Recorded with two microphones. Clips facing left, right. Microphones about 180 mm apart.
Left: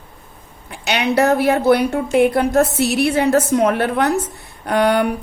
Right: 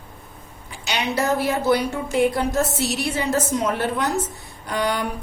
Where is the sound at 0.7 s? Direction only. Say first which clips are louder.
Left 7 dB; 60° left (ahead or behind).